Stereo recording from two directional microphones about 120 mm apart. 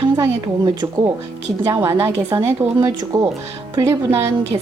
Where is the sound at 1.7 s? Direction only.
20° right (ahead or behind).